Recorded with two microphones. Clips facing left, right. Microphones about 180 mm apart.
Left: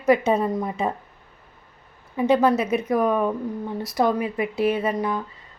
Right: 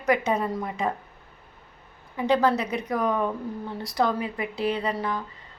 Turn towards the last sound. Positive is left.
turn(degrees=20)  # may be behind; listen again after turning